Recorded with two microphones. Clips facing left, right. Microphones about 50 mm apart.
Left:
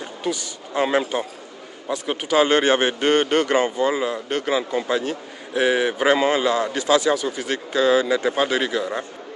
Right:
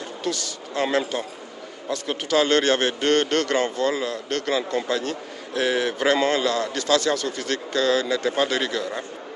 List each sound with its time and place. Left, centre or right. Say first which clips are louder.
0.0 s a man's voice: left 1 dB; centre